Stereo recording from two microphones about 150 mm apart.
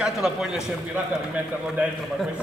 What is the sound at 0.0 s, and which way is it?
Speech, 5° right (ahead or behind).